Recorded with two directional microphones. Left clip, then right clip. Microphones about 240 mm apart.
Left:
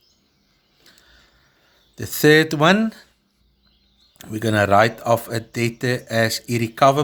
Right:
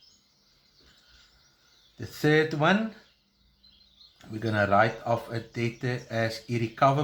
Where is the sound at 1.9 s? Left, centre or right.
Left.